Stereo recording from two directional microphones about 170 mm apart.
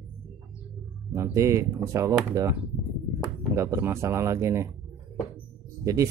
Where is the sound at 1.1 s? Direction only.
15° right (ahead or behind).